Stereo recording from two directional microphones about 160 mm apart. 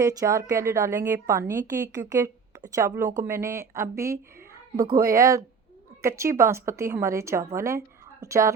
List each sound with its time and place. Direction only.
0.0 s a woman's voice: 20° right (ahead or behind)